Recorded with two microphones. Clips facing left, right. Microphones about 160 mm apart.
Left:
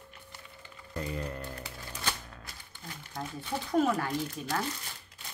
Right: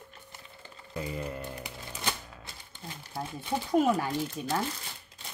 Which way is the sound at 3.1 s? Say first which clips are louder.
Right 3 dB; 15° right (ahead or behind).